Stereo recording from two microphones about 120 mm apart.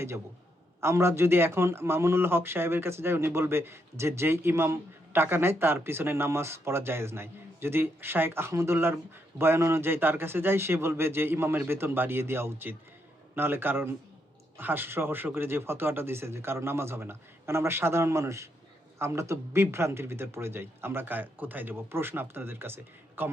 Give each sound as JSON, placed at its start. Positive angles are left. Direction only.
{"t": 0.8, "sound": "speech", "side_deg": -25}